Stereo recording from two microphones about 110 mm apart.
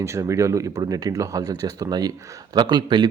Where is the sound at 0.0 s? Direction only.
25° right (ahead or behind).